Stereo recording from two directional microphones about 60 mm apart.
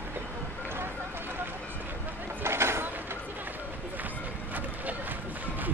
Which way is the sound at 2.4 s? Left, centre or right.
Right.